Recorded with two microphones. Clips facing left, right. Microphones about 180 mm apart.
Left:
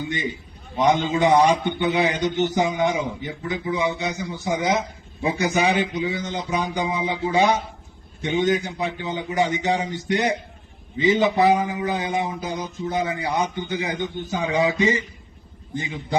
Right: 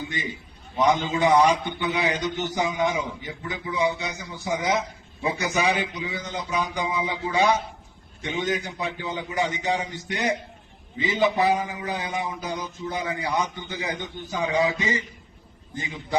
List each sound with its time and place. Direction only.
0.8 s a man's voice: 25° left (ahead or behind)